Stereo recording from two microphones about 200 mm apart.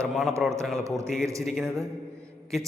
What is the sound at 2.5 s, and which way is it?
Speech, centre (ahead or behind).